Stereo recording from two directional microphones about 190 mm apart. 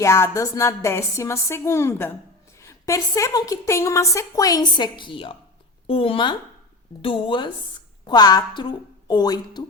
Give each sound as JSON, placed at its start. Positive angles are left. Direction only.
{"t": 0.0, "sound": "a woman's voice", "side_deg": 15}